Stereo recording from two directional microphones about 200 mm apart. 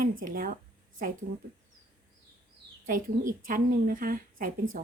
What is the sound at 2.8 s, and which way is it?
A woman's voice, 40° right (ahead or behind).